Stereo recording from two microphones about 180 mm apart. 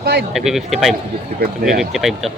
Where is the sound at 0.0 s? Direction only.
60° right (ahead or behind).